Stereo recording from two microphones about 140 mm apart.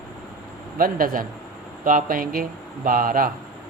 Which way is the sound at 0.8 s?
90° right.